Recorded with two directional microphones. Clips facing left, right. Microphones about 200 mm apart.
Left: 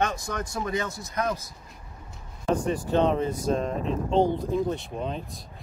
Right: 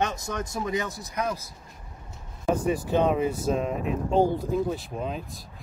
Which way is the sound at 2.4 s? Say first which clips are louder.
Right 1 dB; 5° right (ahead or behind).